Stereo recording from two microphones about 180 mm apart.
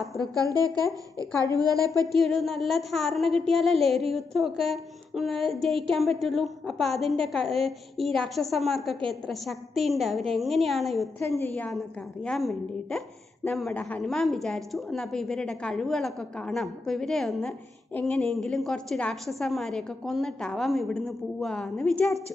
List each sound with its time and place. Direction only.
0.4 s a woman's voice: 20° right (ahead or behind)
2.1 s a woman's voice: centre (ahead or behind)
11.1 s a woman's voice: 15° left (ahead or behind)